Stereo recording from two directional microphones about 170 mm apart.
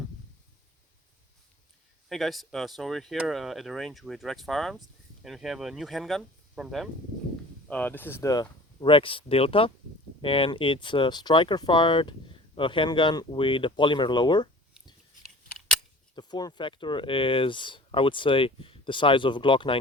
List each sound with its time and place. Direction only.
2.0 s speech: centre (ahead or behind)
7.7 s speech: 10° left (ahead or behind); by 14.9 s 25° left (ahead or behind)
16.1 s speech: 25° left (ahead or behind)